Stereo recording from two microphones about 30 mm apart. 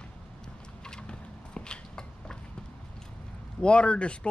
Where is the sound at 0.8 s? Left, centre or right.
Left.